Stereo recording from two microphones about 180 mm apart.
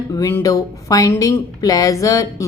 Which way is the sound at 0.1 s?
20° left (ahead or behind).